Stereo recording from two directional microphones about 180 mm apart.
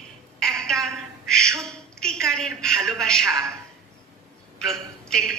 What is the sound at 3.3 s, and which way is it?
Speech, 15° right (ahead or behind).